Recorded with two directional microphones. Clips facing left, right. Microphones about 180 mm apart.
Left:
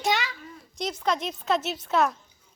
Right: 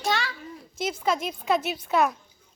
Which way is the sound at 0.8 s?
5° right (ahead or behind).